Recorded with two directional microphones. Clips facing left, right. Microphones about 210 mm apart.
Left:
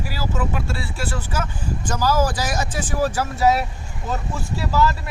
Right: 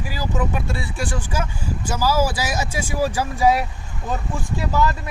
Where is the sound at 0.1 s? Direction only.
15° right (ahead or behind).